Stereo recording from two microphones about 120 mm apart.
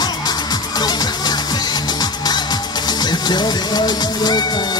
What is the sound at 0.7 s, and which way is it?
Music, 35° left (ahead or behind).